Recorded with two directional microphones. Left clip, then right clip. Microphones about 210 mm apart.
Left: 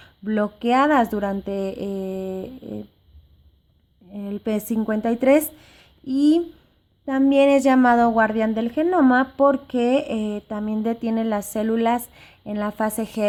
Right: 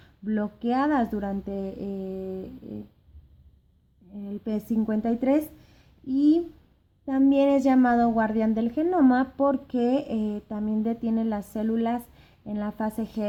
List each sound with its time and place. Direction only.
0.3 s speech: 20° left (ahead or behind)
4.1 s a woman's voice: 25° left (ahead or behind)